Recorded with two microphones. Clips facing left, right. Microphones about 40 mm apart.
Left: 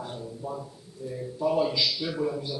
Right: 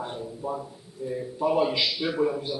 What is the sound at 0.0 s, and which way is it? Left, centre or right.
A man's voice, right.